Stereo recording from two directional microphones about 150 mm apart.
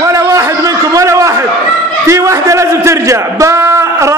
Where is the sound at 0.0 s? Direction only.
20° right (ahead or behind).